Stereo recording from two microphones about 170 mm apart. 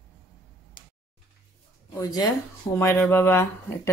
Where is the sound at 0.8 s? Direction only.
55° left (ahead or behind).